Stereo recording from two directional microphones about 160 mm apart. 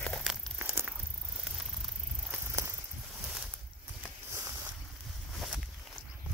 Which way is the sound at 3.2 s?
5° right (ahead or behind).